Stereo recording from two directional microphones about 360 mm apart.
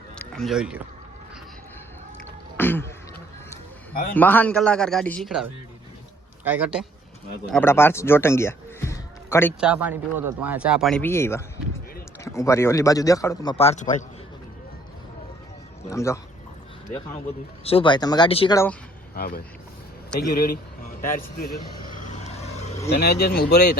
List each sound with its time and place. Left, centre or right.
0.2 s speech: centre
2.6 s speech: centre
4.1 s a man's voice: centre
15.9 s speech: centre
17.6 s speech: centre
19.1 s speech: left
22.1 s vehicle: centre